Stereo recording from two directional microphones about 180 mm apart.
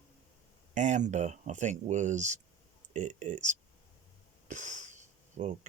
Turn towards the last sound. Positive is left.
turn(degrees=-40)  # may be behind; listen again after turning